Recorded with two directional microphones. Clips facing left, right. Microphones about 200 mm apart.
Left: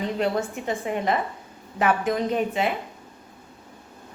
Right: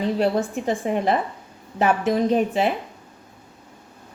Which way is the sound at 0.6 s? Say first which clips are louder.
Right 4 dB; 35° right (ahead or behind).